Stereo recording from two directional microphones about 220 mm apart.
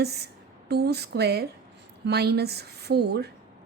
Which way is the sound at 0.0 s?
45° right (ahead or behind).